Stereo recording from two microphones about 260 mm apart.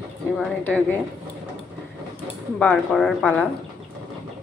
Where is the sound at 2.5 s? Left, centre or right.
Centre.